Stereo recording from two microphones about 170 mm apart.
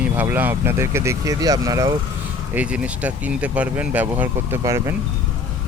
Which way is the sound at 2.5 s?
10° right (ahead or behind).